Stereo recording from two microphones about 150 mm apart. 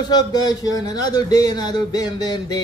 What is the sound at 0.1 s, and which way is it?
Speech, 25° left (ahead or behind).